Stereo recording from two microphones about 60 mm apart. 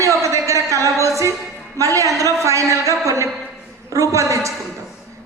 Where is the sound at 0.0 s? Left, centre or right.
Right.